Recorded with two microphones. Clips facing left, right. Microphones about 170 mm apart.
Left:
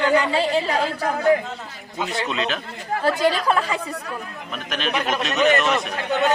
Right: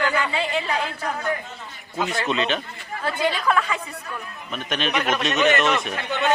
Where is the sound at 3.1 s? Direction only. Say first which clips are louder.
Left 3 dB; 35° left (ahead or behind).